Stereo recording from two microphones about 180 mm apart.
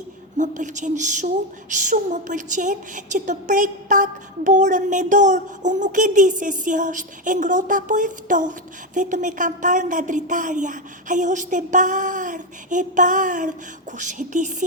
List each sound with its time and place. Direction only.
0.3 s a woman's voice: 45° right (ahead or behind)